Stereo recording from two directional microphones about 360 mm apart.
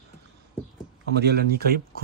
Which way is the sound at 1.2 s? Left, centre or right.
Right.